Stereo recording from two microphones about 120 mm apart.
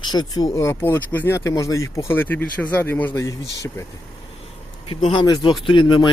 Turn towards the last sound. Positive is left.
turn(degrees=40)  # may be behind; listen again after turning